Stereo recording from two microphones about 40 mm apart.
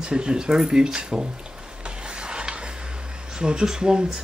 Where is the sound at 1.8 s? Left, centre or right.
Right.